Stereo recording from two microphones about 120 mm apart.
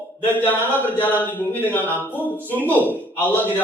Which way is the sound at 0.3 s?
15° left (ahead or behind).